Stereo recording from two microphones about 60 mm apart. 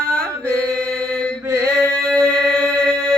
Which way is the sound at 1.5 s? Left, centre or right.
Right.